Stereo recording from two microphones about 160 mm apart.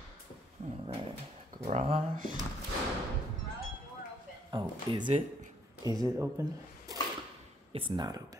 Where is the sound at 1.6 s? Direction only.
45° right (ahead or behind).